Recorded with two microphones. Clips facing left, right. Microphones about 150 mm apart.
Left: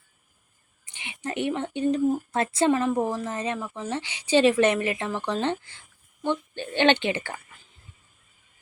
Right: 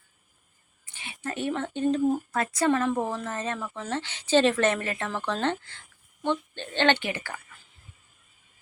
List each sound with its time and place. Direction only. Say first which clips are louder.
0.9 s speech: left 2 dB; 20° left (ahead or behind)
2.3 s a woman's voice: left 3 dB; 25° left (ahead or behind)
2.6 s a woman's voice: left 1 dB; 15° left (ahead or behind)